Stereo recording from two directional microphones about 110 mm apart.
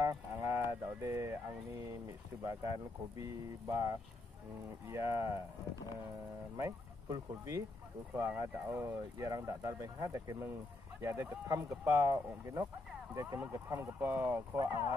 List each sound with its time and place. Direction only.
0.0 s a sound: 25° right (ahead or behind)
3.2 s speech: 30° right (ahead or behind)
6.5 s speech: 30° right (ahead or behind)